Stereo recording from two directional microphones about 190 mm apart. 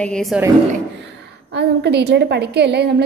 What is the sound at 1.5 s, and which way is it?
A woman's voice, 60° right (ahead or behind).